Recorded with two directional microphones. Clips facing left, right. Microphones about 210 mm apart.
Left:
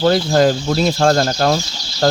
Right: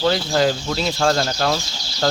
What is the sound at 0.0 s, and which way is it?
Speech, 50° left (ahead or behind).